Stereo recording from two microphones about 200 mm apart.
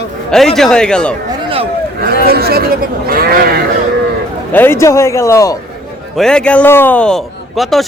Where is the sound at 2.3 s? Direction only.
50° right (ahead or behind).